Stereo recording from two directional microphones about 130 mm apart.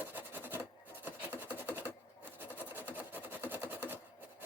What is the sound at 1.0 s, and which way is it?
Rub, 15° right (ahead or behind).